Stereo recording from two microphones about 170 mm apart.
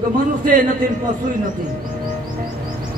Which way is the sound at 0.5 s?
50° right (ahead or behind).